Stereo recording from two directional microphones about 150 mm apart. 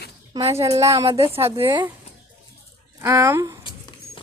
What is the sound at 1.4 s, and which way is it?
Speech, 35° right (ahead or behind).